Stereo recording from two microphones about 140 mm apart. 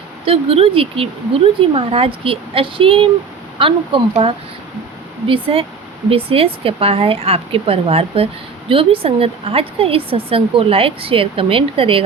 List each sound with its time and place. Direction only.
0.3 s a woman's voice: 40° right (ahead or behind)